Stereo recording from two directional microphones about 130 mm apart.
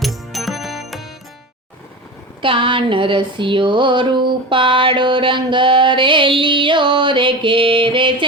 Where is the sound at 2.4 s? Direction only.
40° right (ahead or behind).